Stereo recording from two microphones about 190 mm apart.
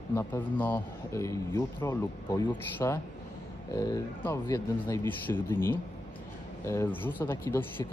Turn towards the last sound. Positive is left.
turn(degrees=10)  # may be behind; listen again after turning